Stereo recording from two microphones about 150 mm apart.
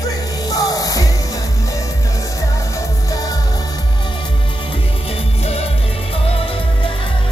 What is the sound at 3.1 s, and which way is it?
Music, 25° left (ahead or behind).